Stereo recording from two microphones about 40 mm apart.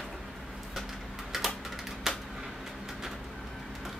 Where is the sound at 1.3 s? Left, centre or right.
Centre.